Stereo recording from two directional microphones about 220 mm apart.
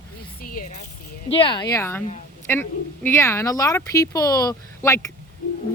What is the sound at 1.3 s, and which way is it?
Speech, 25° left (ahead or behind).